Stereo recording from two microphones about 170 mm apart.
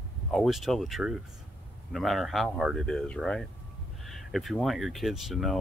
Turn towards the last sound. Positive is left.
turn(degrees=0)  # may be behind; listen again after turning